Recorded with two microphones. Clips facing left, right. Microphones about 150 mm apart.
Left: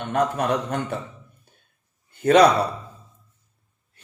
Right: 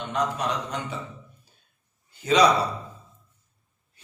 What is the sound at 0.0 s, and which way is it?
Speech, 55° left (ahead or behind).